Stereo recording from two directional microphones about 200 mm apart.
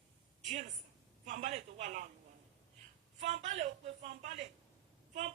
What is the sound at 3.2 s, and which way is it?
A man's voice, 35° right (ahead or behind).